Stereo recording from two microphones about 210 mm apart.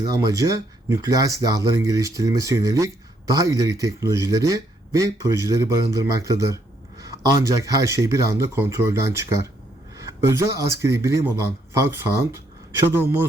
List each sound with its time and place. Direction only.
0.3 s speech: 15° right (ahead or behind)